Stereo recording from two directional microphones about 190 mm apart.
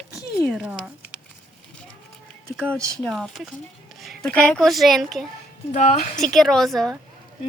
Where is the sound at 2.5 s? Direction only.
5° left (ahead or behind).